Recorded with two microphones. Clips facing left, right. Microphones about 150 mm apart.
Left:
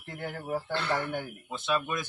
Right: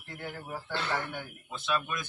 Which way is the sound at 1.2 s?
20° left (ahead or behind).